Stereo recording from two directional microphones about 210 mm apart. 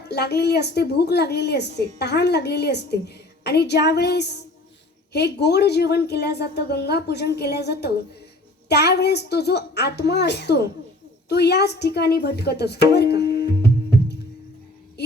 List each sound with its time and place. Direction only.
0.1 s a woman's voice: 50° left (ahead or behind)